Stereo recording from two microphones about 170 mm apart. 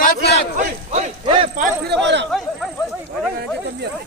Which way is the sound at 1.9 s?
90° right.